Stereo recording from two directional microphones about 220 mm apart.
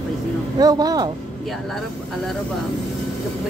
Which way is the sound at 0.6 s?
15° right (ahead or behind).